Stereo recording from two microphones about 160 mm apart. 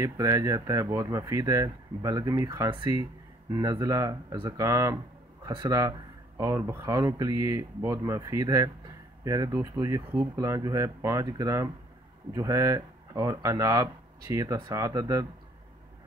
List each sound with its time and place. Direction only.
0.0 s speech: 20° right (ahead or behind)